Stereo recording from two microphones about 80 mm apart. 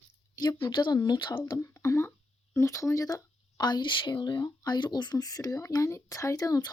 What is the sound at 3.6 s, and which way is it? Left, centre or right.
Speech, left.